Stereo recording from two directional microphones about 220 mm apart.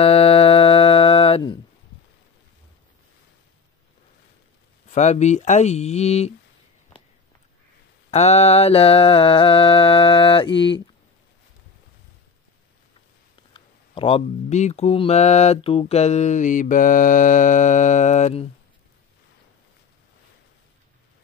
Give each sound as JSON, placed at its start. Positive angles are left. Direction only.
{"t": 0.0, "sound": "music", "side_deg": 25}
{"t": 4.8, "sound": "speech", "side_deg": 30}
{"t": 8.1, "sound": "mantra", "side_deg": 30}
{"t": 13.5, "sound": "speech", "side_deg": 25}